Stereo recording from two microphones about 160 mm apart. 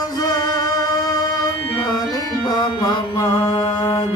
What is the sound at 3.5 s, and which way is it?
Mantra, 25° left (ahead or behind).